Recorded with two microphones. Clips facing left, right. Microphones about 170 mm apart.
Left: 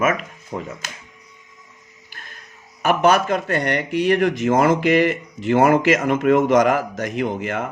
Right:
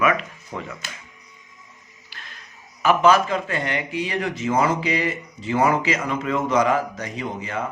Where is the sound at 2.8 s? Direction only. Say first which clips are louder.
Even; 60° left (ahead or behind); by 4.1 s 75° left (ahead or behind).